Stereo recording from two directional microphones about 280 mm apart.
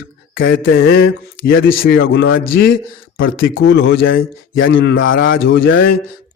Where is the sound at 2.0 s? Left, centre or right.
Left.